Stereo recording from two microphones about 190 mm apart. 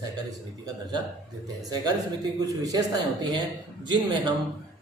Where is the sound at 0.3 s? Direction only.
20° right (ahead or behind).